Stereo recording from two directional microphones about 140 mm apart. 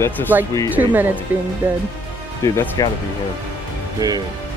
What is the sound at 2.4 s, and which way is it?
Speech, 20° left (ahead or behind).